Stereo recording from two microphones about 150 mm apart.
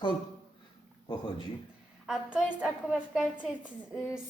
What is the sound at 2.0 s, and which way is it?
A woman's voice, 5° right (ahead or behind).